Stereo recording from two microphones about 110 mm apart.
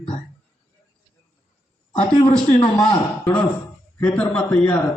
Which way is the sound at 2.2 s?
65° left (ahead or behind).